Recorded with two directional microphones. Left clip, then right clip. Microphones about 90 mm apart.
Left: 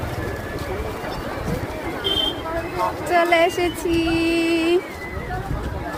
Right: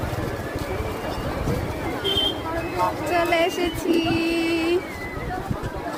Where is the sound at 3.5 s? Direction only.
50° left (ahead or behind).